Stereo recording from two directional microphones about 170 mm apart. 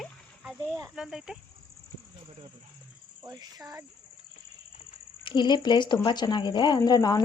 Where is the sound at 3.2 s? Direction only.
20° right (ahead or behind).